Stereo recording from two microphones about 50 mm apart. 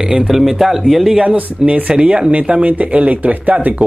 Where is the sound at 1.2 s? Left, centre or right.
Right.